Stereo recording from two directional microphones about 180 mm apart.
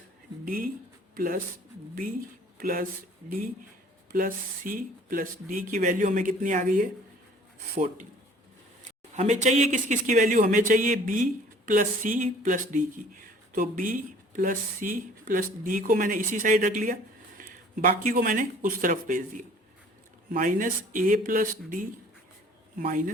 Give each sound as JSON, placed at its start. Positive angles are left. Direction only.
{"t": 0.4, "sound": "speech", "side_deg": -50}
{"t": 2.6, "sound": "speech", "side_deg": -55}
{"t": 8.8, "sound": "speech", "side_deg": -40}
{"t": 20.3, "sound": "speech", "side_deg": -50}